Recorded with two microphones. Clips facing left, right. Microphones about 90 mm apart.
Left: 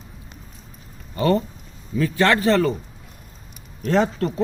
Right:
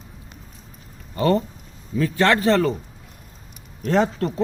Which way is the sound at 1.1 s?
35° right (ahead or behind).